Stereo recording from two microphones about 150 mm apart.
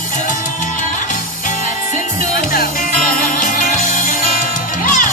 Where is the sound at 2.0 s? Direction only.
70° left (ahead or behind).